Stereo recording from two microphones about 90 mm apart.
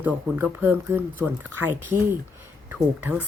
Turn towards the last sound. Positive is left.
turn(degrees=-20)  # may be behind; listen again after turning